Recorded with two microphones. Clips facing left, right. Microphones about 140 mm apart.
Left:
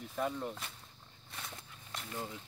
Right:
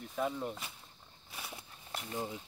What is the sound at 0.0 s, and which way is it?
Speech, centre (ahead or behind).